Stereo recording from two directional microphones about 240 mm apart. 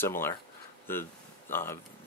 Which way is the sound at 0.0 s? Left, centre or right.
Centre.